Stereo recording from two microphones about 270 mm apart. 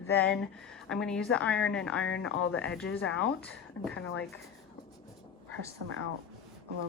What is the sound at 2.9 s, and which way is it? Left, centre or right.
Speech, left.